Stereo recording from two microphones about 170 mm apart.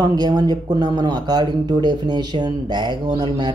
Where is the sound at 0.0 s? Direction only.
25° right (ahead or behind).